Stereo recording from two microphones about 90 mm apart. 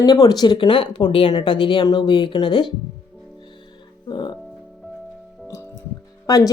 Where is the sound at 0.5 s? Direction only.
70° left (ahead or behind).